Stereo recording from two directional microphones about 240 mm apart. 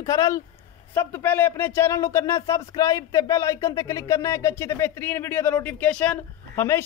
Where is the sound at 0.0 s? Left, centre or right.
Centre.